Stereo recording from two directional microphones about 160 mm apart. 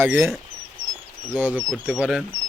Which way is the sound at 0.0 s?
15° right (ahead or behind).